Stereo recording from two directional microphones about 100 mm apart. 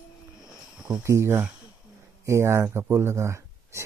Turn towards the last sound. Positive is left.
turn(degrees=-30)  # may be behind; listen again after turning